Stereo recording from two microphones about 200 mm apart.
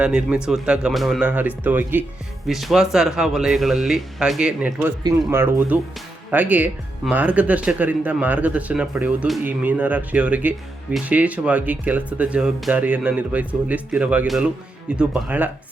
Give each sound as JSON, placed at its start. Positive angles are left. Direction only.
{"t": 0.0, "sound": "speech", "side_deg": -5}